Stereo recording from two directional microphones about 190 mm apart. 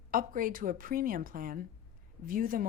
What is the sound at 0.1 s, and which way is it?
A woman's voice, 45° right (ahead or behind).